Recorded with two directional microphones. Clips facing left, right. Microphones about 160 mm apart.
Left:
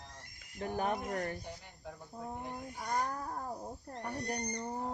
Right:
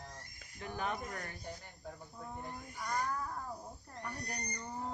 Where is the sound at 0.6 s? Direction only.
45° left (ahead or behind).